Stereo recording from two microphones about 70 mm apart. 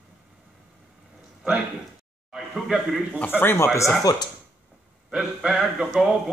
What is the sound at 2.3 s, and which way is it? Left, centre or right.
Speech, centre.